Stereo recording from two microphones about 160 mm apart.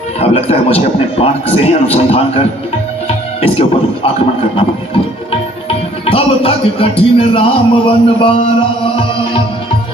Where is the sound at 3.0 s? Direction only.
35° left (ahead or behind).